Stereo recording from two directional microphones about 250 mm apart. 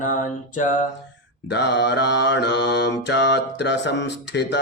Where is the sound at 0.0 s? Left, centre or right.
Left.